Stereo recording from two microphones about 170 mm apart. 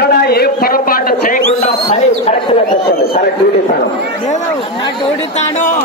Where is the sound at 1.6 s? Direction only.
35° left (ahead or behind).